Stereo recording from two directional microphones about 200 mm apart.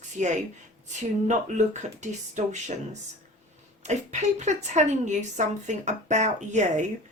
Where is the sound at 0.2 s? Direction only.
35° right (ahead or behind).